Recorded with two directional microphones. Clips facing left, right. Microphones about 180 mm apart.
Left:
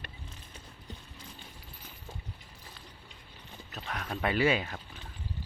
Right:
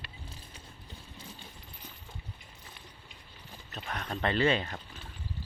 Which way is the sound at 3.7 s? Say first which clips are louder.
Even; centre (ahead or behind).